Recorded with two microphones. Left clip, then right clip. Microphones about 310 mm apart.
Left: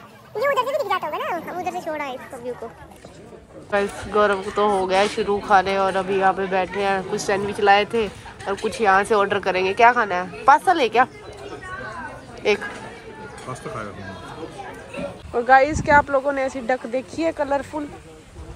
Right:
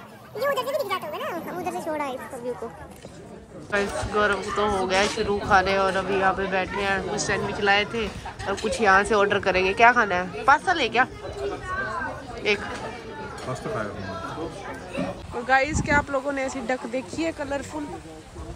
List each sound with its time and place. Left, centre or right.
0.4 s speech: centre
3.7 s speech: centre
12.4 s speech: centre
15.3 s speech: centre